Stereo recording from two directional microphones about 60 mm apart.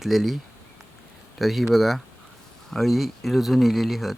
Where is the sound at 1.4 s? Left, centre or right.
Centre.